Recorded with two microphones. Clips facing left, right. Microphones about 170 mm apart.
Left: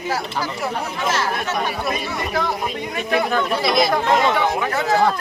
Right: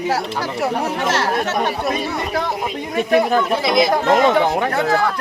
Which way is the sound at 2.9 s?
40° right (ahead or behind).